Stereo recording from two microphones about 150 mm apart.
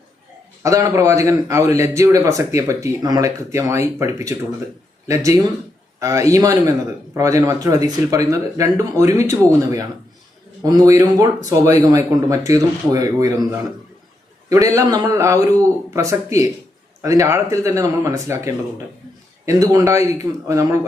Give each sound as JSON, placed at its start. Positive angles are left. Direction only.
{"t": 0.6, "sound": "a man's voice", "side_deg": -25}